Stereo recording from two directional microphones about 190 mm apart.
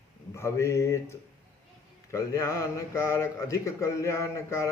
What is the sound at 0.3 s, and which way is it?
Speech, 15° left (ahead or behind).